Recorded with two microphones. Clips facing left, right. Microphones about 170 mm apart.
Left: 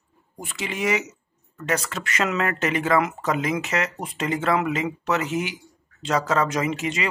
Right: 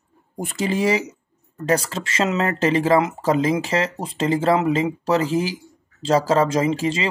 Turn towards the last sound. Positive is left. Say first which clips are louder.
# right 5 dB
turn(degrees=-30)  # may be behind; listen again after turning